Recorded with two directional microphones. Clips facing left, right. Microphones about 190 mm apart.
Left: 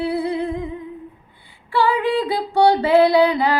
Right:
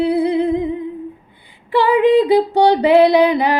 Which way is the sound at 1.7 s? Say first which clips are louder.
Right 7 dB; 20° right (ahead or behind).